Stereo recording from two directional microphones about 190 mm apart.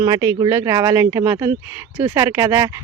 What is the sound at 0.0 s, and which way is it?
Speech, 20° right (ahead or behind).